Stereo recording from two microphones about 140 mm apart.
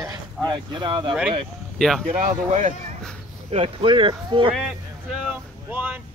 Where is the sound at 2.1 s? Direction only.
60° right (ahead or behind).